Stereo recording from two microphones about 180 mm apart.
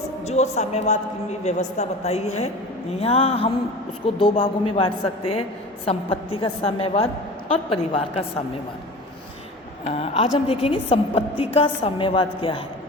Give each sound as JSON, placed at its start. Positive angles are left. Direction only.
{"t": 0.3, "sound": "a woman's voice", "side_deg": 40}
{"t": 9.8, "sound": "a woman's voice", "side_deg": 35}